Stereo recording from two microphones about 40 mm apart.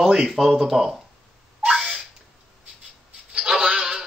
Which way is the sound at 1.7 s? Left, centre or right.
Centre.